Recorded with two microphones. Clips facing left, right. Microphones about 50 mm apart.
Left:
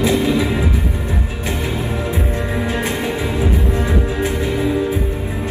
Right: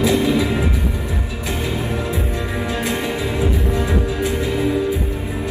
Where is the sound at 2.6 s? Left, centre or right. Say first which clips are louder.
Right 1 dB; left.